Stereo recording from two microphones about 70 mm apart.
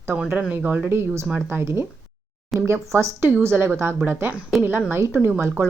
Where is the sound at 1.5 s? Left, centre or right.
Right.